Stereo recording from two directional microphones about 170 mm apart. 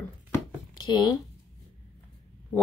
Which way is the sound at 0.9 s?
25° left (ahead or behind).